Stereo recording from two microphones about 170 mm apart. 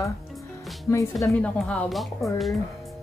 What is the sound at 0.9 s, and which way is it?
Speech, 15° left (ahead or behind).